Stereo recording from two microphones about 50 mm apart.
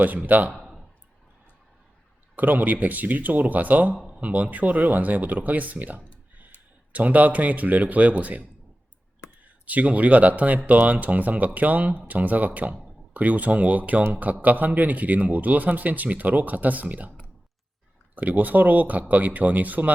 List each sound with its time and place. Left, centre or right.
0.0 s speech: right
0.5 s a sound: centre
2.3 s speech: right
18.1 s speech: right